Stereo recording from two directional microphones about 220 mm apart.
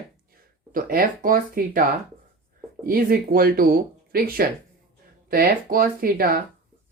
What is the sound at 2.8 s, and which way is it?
Speech, 40° right (ahead or behind).